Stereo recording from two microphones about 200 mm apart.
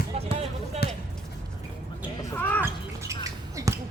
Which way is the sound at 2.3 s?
10° left (ahead or behind).